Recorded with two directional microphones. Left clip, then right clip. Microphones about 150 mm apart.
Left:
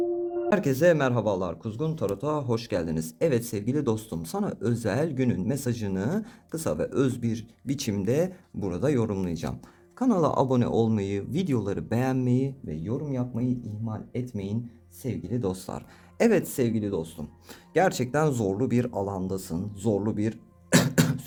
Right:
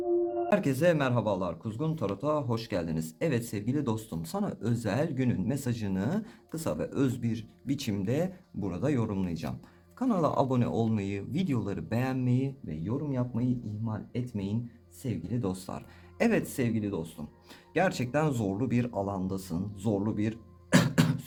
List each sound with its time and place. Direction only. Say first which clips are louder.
0.5 s speech: left 5 dB; 50° left (ahead or behind)
12.8 s speech: left 2 dB; 30° left (ahead or behind)